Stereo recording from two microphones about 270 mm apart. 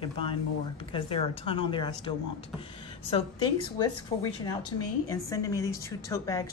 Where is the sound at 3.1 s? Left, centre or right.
Centre.